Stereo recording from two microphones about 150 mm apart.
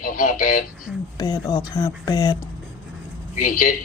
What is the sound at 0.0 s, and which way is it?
Speech, 65° left (ahead or behind).